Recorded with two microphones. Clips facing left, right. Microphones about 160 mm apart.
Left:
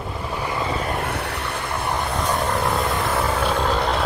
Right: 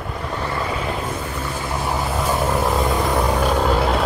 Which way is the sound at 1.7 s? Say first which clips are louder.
Right 2 dB; 5° right (ahead or behind).